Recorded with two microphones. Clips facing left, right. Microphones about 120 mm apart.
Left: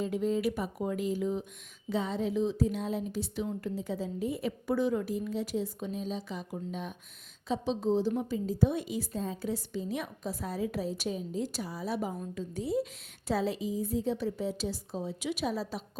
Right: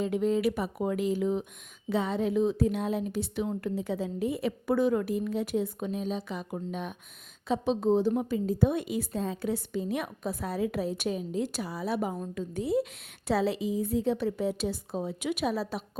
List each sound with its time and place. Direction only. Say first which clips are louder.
0.0 s a woman's voice: right 3 dB; 70° right (ahead or behind)